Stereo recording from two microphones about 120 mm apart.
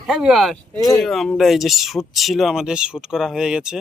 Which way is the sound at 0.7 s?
30° left (ahead or behind).